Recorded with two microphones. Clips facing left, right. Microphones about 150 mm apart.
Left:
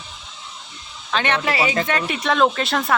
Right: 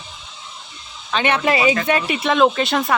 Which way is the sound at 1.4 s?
20° right (ahead or behind).